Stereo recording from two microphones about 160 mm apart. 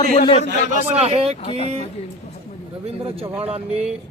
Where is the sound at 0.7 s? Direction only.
40° right (ahead or behind).